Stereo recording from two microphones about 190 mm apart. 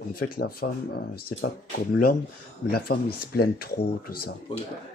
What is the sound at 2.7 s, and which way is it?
Speech, 55° left (ahead or behind).